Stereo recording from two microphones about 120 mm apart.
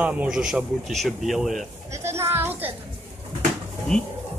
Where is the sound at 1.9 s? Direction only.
20° right (ahead or behind).